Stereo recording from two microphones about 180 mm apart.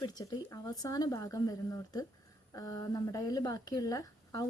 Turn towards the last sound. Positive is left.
turn(degrees=20)  # may be behind; listen again after turning